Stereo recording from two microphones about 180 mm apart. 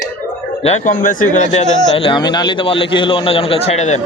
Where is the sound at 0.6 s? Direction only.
35° left (ahead or behind).